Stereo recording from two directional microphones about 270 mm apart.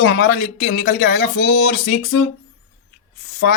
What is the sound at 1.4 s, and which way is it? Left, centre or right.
Music, left.